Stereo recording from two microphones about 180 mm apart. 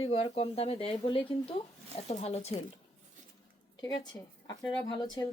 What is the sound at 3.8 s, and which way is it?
A woman's voice, 25° left (ahead or behind).